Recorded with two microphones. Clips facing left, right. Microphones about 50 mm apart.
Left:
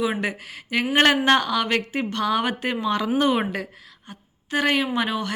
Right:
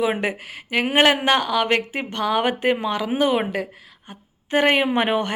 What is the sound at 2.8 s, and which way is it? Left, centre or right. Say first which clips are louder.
A woman's voice: even; centre.